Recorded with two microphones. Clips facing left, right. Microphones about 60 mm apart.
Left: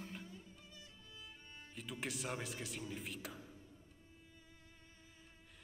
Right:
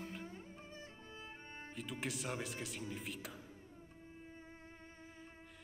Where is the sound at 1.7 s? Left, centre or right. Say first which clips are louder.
Right 1 dB; centre.